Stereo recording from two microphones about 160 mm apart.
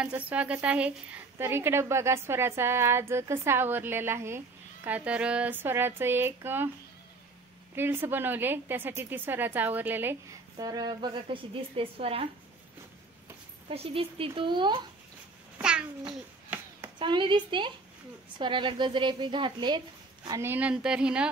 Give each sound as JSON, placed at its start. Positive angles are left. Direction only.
{"t": 0.0, "sound": "a woman's voice", "side_deg": -10}
{"t": 7.7, "sound": "a woman's voice", "side_deg": -15}
{"t": 10.6, "sound": "a woman's voice", "side_deg": -25}
{"t": 13.7, "sound": "a woman's voice", "side_deg": -35}
{"t": 15.5, "sound": "babbling", "side_deg": -5}
{"t": 16.1, "sound": "a sound", "side_deg": -10}
{"t": 17.0, "sound": "a woman's voice", "side_deg": -30}
{"t": 20.2, "sound": "a woman's voice", "side_deg": -15}